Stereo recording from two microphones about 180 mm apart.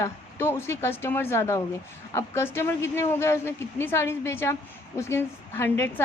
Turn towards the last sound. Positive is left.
turn(degrees=15)  # may be behind; listen again after turning